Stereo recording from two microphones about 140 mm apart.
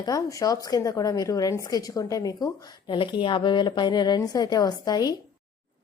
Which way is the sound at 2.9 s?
35° left (ahead or behind).